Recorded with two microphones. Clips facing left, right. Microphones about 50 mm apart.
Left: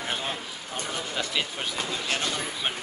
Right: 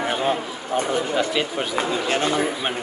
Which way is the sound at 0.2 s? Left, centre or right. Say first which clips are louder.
Right 10 dB; right.